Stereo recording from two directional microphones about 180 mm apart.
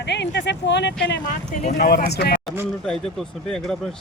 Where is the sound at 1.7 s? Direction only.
60° left (ahead or behind).